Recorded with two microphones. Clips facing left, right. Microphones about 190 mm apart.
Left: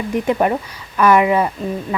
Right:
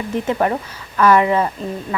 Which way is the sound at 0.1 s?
15° left (ahead or behind).